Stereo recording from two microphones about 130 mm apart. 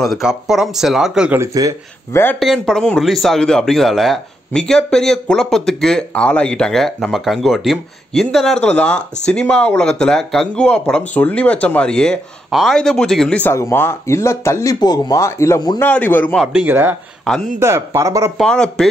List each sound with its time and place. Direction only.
0.0 s speech: centre (ahead or behind)
1.4 s speech: 25° right (ahead or behind)
2.4 s speech: centre (ahead or behind)
13.5 s speech: 20° left (ahead or behind)
15.8 s a man's voice: 15° left (ahead or behind)
16.6 s speech: 15° right (ahead or behind)
18.4 s speech: 5° left (ahead or behind)